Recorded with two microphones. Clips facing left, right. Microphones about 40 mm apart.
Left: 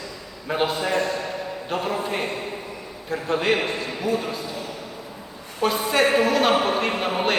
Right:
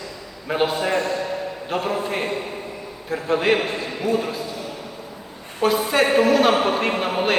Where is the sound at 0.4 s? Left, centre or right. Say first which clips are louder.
Right 2 dB; centre.